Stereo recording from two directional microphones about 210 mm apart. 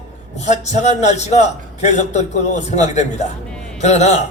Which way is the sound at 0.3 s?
30° left (ahead or behind).